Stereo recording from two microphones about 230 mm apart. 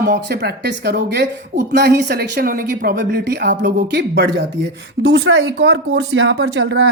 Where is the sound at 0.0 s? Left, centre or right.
Right.